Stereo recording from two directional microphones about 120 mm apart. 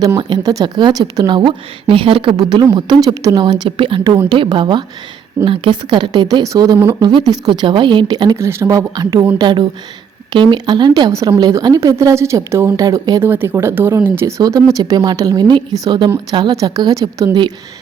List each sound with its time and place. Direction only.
0.2 s a woman's voice: 40° right (ahead or behind)
2.3 s a woman's voice: 35° right (ahead or behind)
6.4 s a woman's voice: 30° right (ahead or behind)
8.4 s a woman's voice: 20° right (ahead or behind)
13.2 s a woman's voice: 20° right (ahead or behind)